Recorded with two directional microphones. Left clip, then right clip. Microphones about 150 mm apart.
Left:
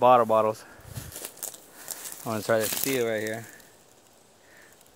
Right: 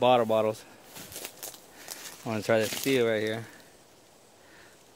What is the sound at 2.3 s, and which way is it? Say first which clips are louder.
Speech: left 1 dB; 15° right (ahead or behind).